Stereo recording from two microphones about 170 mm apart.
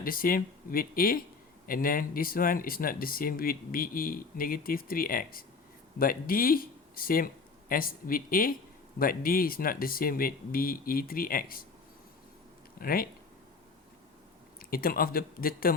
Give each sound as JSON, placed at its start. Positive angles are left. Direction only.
{"t": 0.0, "sound": "speech", "side_deg": 55}
{"t": 12.8, "sound": "speech", "side_deg": 60}
{"t": 14.6, "sound": "speech", "side_deg": 60}